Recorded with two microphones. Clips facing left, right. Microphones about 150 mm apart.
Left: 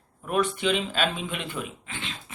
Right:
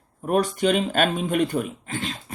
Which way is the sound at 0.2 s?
40° right (ahead or behind).